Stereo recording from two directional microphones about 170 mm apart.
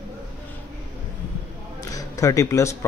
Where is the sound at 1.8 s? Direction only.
20° left (ahead or behind).